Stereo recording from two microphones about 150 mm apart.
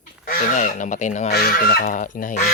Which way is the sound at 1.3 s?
85° left.